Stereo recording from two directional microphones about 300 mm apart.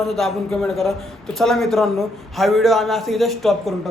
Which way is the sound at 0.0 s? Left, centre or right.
Centre.